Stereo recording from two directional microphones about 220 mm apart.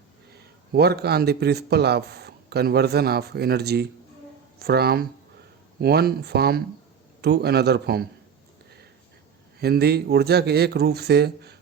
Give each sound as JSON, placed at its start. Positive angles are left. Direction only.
{"t": 0.7, "sound": "speech", "side_deg": -45}
{"t": 9.6, "sound": "speech", "side_deg": -45}